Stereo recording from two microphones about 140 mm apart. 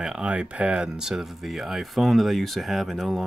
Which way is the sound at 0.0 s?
5° right (ahead or behind).